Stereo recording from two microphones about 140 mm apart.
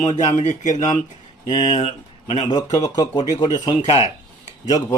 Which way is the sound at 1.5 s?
40° left (ahead or behind).